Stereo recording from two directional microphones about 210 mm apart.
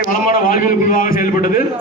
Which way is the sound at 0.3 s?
45° left (ahead or behind).